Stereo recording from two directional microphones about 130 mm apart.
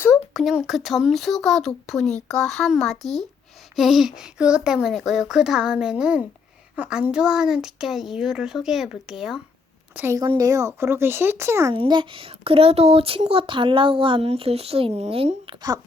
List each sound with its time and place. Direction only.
0.3 s speech: centre (ahead or behind)
9.9 s a woman's voice: 15° right (ahead or behind)
10.2 s speech: 25° right (ahead or behind)
11.7 s speech: 40° right (ahead or behind)